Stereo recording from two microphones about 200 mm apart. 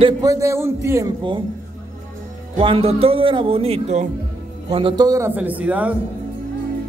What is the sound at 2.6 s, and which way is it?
A man's voice, 25° right (ahead or behind).